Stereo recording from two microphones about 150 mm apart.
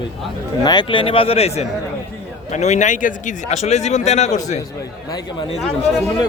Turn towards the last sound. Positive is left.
turn(degrees=0)  # may be behind; listen again after turning